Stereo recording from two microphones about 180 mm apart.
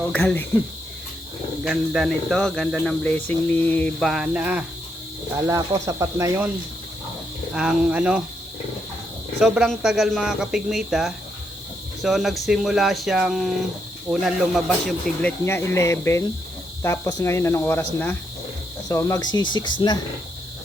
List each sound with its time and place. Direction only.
0.0 s speech: 10° left (ahead or behind)
1.6 s speech: 5° right (ahead or behind)
5.4 s speech: 20° right (ahead or behind)
7.5 s speech: 5° right (ahead or behind)
9.4 s speech: 5° right (ahead or behind)
15.4 s speech: 15° left (ahead or behind)
18.9 s cricket: 20° left (ahead or behind)